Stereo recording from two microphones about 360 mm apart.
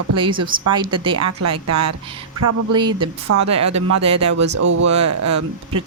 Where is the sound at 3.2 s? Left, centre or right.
Right.